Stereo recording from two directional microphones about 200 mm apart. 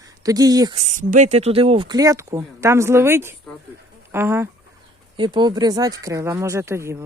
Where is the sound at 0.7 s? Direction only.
35° right (ahead or behind); by 4.5 s 10° right (ahead or behind).